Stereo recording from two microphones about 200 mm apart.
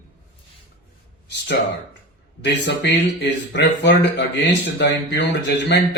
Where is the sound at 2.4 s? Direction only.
60° left (ahead or behind).